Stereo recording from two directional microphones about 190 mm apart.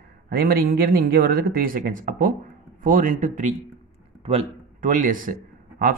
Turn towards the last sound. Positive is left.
turn(degrees=-50)  # may be behind; listen again after turning